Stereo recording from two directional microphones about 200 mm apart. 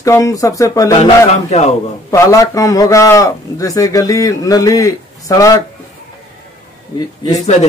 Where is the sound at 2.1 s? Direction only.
15° left (ahead or behind).